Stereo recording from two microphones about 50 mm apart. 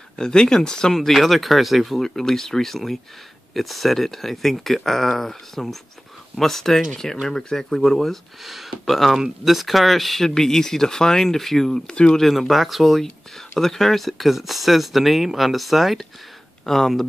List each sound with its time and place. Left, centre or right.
0.2 s speech: centre
0.9 s speech: centre
8.4 s speech: centre
11.9 s speech: centre
12.2 s speech: centre
13.0 s speech: centre